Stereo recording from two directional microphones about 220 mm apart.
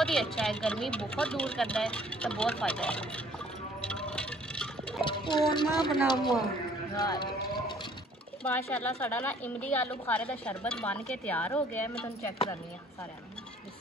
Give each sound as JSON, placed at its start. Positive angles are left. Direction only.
{"t": 0.0, "sound": "speech", "side_deg": 0}
{"t": 3.8, "sound": "a sound", "side_deg": 5}
{"t": 5.0, "sound": "speech", "side_deg": 20}
{"t": 7.0, "sound": "clip-clop", "side_deg": 20}
{"t": 8.5, "sound": "speech", "side_deg": 10}